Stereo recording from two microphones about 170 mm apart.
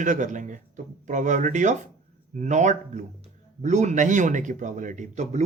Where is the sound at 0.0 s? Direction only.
45° right (ahead or behind).